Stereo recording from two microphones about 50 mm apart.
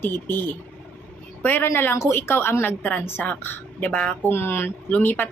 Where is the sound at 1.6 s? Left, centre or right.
Left.